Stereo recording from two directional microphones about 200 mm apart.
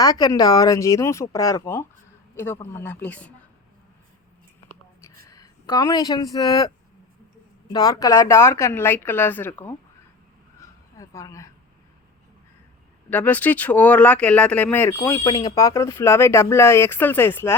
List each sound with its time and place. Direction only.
0.0 s speech: 20° left (ahead or behind)
5.2 s speech: 15° left (ahead or behind)
10.9 s a woman's voice: 15° left (ahead or behind)
13.1 s speech: 10° left (ahead or behind)